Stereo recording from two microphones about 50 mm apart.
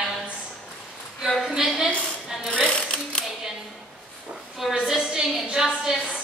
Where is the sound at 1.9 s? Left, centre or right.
Left.